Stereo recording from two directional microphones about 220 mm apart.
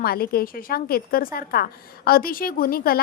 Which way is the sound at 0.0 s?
45° left (ahead or behind).